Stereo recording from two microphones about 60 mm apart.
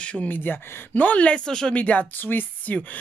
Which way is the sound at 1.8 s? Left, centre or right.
Left.